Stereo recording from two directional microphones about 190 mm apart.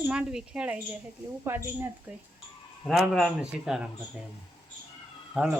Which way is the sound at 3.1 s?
Centre (ahead or behind).